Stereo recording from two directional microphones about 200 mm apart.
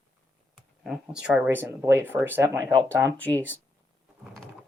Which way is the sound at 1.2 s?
5° right (ahead or behind).